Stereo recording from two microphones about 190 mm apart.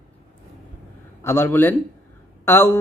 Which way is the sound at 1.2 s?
10° left (ahead or behind).